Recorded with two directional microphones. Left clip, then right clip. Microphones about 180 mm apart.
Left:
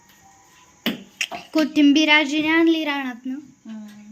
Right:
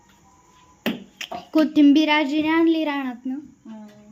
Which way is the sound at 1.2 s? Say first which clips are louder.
Right 1 dB; 15° right (ahead or behind).